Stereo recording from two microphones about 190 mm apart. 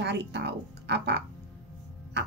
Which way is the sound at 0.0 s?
65° right (ahead or behind).